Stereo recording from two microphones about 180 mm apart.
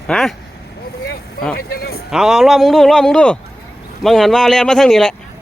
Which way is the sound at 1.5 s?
60° left (ahead or behind).